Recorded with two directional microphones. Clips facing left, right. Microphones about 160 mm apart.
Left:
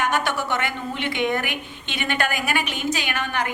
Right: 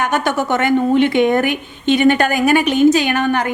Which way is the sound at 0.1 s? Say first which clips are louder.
Right 7 dB; 45° right (ahead or behind).